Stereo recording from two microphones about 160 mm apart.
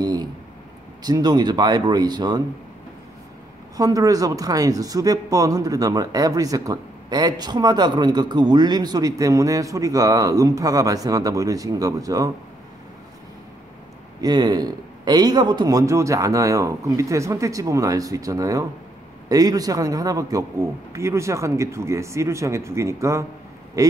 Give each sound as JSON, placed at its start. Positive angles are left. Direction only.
{"t": 0.0, "sound": "a sound", "side_deg": -25}
{"t": 1.0, "sound": "speech", "side_deg": -25}
{"t": 3.7, "sound": "speech", "side_deg": -20}
{"t": 14.2, "sound": "speech", "side_deg": -25}